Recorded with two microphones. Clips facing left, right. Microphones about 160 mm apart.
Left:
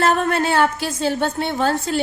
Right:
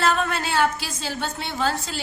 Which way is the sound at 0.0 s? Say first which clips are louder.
Left 5 dB; 55° left (ahead or behind).